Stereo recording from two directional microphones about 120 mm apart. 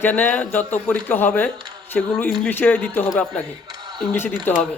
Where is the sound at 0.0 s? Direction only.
15° left (ahead or behind).